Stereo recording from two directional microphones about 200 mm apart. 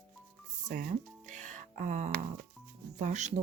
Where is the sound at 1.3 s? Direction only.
40° right (ahead or behind).